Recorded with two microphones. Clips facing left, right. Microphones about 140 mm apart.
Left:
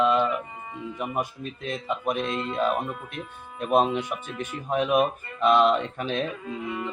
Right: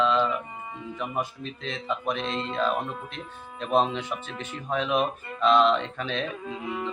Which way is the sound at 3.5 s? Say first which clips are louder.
Left 2 dB; 10° left (ahead or behind).